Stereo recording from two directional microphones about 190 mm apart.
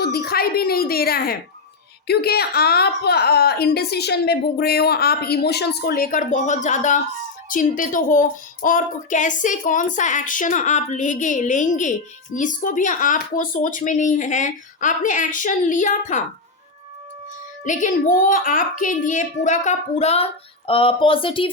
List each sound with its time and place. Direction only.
0.0 s a child's voice: 55° left (ahead or behind)
17.6 s speech: 40° left (ahead or behind)